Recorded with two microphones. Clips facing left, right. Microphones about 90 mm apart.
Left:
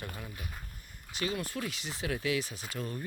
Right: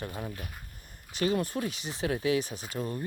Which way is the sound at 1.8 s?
25° right (ahead or behind).